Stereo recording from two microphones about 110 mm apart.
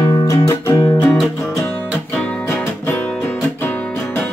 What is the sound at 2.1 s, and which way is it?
Music, 10° left (ahead or behind).